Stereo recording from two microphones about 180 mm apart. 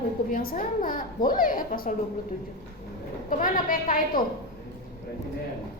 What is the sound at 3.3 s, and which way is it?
Speech, 50° left (ahead or behind).